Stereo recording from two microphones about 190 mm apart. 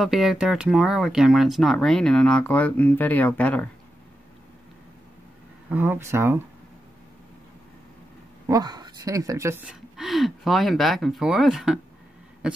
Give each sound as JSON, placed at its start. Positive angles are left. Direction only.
{"t": 0.0, "sound": "speech", "side_deg": 0}
{"t": 5.7, "sound": "speech", "side_deg": -10}
{"t": 8.5, "sound": "speech", "side_deg": -20}
{"t": 9.9, "sound": "speech", "side_deg": 0}